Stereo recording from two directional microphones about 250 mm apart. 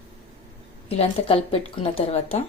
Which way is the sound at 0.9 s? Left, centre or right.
Left.